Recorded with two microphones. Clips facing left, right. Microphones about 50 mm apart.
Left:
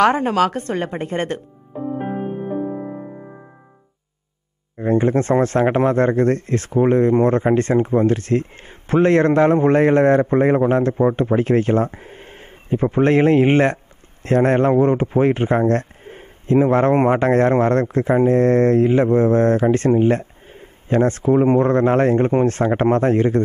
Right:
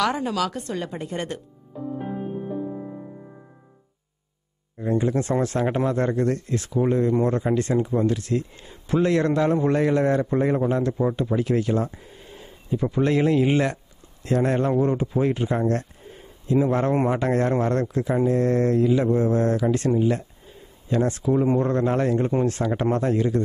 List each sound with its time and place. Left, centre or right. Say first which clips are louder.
0.0 s music: left 8 dB; left
4.7 s speech: left 6 dB; left